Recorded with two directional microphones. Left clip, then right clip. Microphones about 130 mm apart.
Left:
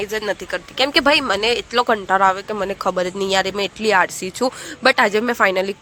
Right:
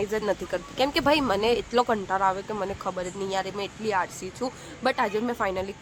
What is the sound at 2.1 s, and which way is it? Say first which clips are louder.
A woman's voice: left 9 dB; 40° left (ahead or behind).